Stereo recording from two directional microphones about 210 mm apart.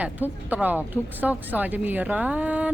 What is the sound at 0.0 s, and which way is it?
Speech, 10° right (ahead or behind).